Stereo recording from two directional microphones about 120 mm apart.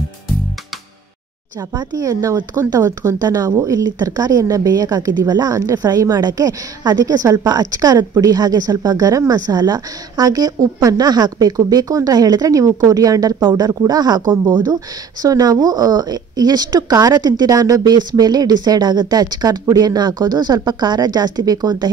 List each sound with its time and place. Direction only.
1.6 s a woman's voice: 35° right (ahead or behind)